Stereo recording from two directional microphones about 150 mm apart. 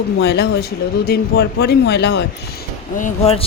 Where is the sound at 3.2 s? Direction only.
40° left (ahead or behind).